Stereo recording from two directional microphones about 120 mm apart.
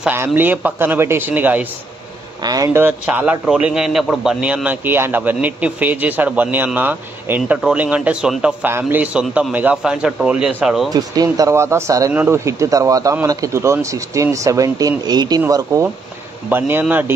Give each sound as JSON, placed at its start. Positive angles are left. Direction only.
{"t": 0.0, "sound": "a man's voice", "side_deg": -15}
{"t": 2.4, "sound": "speech", "side_deg": -30}
{"t": 2.8, "sound": "a man's voice", "side_deg": -15}
{"t": 10.9, "sound": "speech", "side_deg": -30}
{"t": 15.4, "sound": "a man's voice", "side_deg": -25}